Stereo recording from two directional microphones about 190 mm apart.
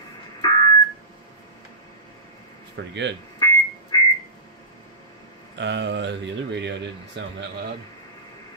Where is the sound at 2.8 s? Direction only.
65° right (ahead or behind).